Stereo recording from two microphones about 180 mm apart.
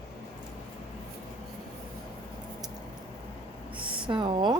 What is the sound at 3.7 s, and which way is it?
Speech, 30° right (ahead or behind).